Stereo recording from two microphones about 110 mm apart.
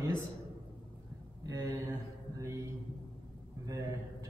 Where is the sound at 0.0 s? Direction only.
25° right (ahead or behind).